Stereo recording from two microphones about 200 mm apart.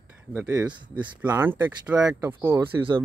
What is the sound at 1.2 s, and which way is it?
Speech, 10° right (ahead or behind).